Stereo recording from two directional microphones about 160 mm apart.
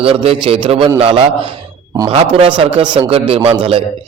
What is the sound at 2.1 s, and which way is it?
A man's voice, 35° right (ahead or behind).